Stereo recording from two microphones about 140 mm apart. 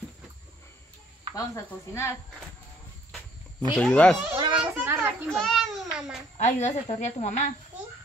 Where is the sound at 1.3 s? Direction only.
20° left (ahead or behind).